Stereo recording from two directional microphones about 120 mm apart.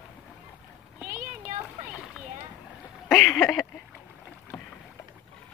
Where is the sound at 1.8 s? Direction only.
10° right (ahead or behind).